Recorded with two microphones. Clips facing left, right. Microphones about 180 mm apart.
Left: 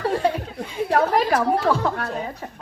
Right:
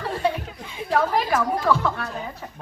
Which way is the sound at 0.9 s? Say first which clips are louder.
Left 2 dB; 70° left (ahead or behind).